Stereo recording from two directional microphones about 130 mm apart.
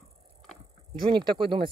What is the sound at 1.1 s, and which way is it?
Speech, 40° right (ahead or behind).